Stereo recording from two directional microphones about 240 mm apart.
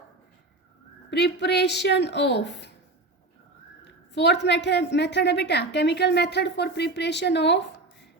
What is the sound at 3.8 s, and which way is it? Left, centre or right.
A woman's voice, left.